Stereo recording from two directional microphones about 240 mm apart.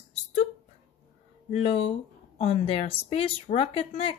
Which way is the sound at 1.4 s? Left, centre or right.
Left.